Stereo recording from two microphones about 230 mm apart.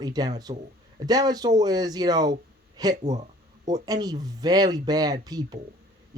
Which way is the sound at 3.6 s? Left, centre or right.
Right.